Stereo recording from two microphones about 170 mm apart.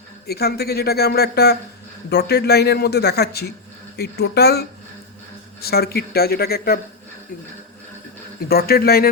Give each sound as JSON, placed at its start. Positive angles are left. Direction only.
{"t": 0.3, "sound": "speech", "side_deg": 70}
{"t": 5.6, "sound": "speech", "side_deg": 65}
{"t": 8.4, "sound": "speech", "side_deg": 65}